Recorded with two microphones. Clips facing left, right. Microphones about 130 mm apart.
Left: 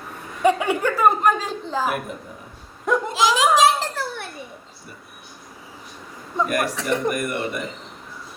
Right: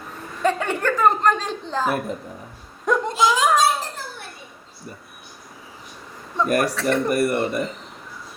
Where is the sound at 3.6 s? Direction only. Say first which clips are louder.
Left 3 dB; 75° left (ahead or behind).